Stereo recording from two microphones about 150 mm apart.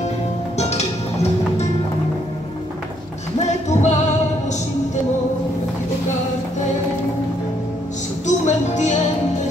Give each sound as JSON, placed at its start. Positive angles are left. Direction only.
{"t": 0.6, "sound": "music", "side_deg": 45}
{"t": 3.4, "sound": "music", "side_deg": 50}
{"t": 8.3, "sound": "music", "side_deg": 55}